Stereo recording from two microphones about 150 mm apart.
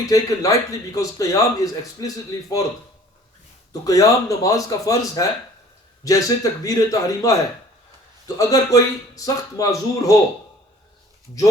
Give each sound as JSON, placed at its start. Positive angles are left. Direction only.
{"t": 0.0, "sound": "a man's voice", "side_deg": 20}
{"t": 3.7, "sound": "a man's voice", "side_deg": 25}
{"t": 8.4, "sound": "a man's voice", "side_deg": 20}